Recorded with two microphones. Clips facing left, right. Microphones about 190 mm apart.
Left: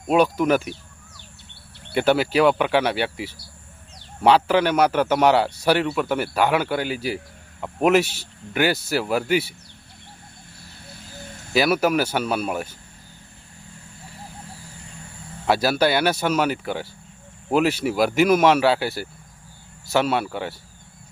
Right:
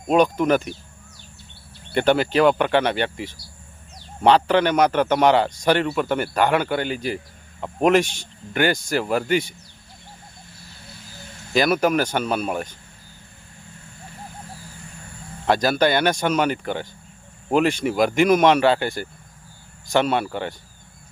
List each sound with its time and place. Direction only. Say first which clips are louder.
0.1 s speech: right 1 dB; 5° left (ahead or behind)
1.9 s speech: right 1 dB; 5° left (ahead or behind)
10.9 s a sound: left 5 dB; 55° left (ahead or behind)
11.5 s speech: even; 5° left (ahead or behind)
15.4 s speech: right 1 dB; 5° left (ahead or behind)